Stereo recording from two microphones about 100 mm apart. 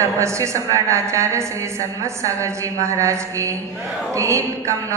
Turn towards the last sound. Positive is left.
turn(degrees=-30)  # may be behind; listen again after turning